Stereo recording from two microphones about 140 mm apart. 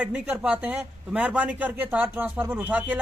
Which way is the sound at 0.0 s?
10° right (ahead or behind).